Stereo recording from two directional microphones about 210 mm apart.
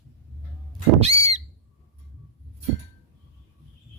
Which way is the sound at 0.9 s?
30° right (ahead or behind).